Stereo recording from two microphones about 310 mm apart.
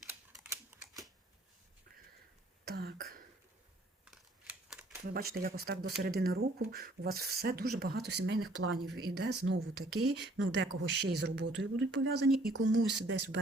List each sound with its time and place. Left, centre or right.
0.1 s typing: centre
2.6 s throat clearing: right
4.0 s scissors: centre
5.1 s speech: right